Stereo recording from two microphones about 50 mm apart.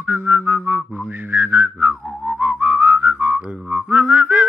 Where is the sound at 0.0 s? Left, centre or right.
Right.